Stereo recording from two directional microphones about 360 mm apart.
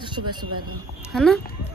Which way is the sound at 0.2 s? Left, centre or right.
Right.